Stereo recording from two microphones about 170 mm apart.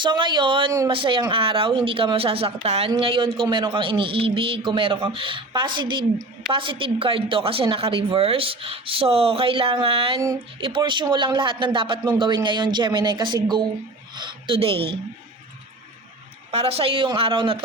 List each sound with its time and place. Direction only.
0.0 s speech: 30° right (ahead or behind)
10.2 s speech: 20° right (ahead or behind)
10.6 s speech: 30° right (ahead or behind)
16.5 s speech: 35° right (ahead or behind)